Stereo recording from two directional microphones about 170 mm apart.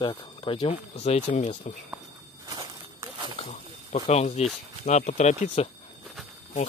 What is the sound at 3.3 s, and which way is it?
Snake, 40° left (ahead or behind).